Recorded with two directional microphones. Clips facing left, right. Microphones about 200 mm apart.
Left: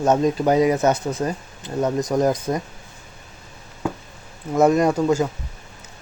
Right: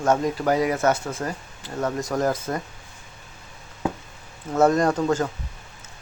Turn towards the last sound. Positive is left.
turn(degrees=10)  # may be behind; listen again after turning